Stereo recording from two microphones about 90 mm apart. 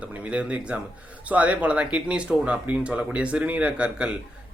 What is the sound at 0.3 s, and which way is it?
Speech, 15° right (ahead or behind).